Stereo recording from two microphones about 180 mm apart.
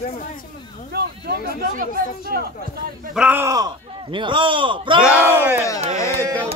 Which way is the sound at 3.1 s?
10° right (ahead or behind).